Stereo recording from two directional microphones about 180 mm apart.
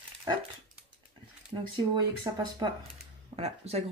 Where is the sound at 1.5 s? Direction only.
25° right (ahead or behind).